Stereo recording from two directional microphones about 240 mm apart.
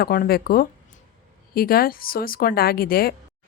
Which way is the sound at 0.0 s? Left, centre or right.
Left.